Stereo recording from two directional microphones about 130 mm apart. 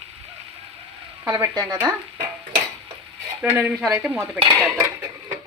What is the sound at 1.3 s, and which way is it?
Speech, 30° right (ahead or behind).